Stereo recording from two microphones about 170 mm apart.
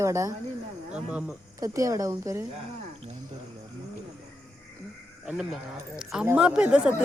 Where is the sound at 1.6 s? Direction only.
20° right (ahead or behind).